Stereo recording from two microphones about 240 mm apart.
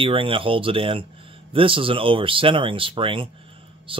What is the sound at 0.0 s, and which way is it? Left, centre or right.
Speech, right.